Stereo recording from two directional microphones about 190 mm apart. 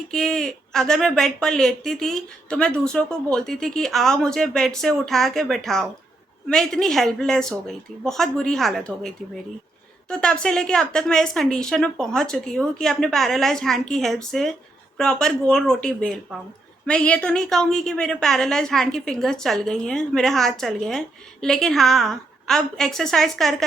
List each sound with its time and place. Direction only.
0.1 s speech: 5° left (ahead or behind)